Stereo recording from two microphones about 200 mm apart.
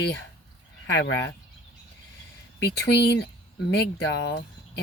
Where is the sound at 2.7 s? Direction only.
55° left (ahead or behind).